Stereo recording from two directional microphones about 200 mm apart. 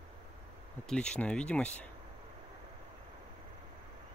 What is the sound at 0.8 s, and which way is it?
Speech, 5° left (ahead or behind).